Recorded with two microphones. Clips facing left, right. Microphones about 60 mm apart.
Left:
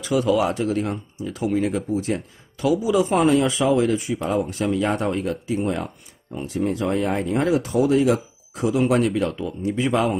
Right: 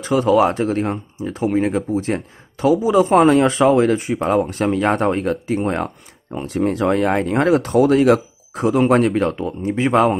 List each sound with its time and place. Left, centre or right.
0.0 s speech: right